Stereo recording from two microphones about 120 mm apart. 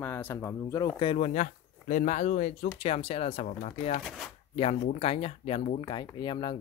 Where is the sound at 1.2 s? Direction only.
80° left; by 5.7 s 50° left (ahead or behind).